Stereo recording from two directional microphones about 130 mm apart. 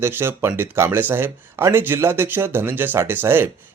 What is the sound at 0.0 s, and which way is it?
Speech, 20° right (ahead or behind).